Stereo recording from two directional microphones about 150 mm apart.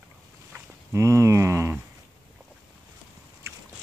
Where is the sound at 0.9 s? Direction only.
20° right (ahead or behind).